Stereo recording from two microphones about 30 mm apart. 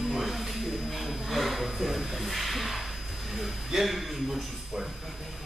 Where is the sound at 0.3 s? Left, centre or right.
Centre.